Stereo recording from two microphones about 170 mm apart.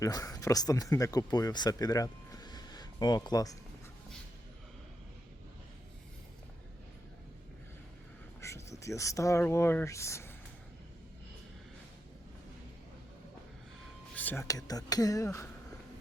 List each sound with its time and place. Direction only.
0.0 s speech: 20° left (ahead or behind)
8.4 s speech: 15° left (ahead or behind)
14.2 s speech: 15° left (ahead or behind)